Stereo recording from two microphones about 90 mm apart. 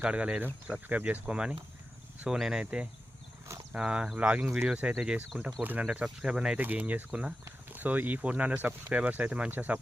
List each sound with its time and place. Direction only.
0.0 s speech: 15° right (ahead or behind)
4.4 s speech: 30° right (ahead or behind)
4.7 s speech: 15° right (ahead or behind)